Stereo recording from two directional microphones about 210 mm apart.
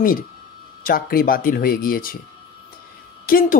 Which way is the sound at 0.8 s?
45° left (ahead or behind).